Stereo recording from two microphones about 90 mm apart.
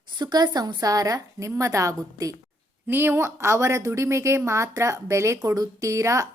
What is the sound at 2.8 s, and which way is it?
Speech, 25° right (ahead or behind).